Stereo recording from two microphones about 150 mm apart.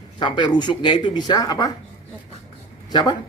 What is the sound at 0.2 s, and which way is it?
Speech, 30° left (ahead or behind).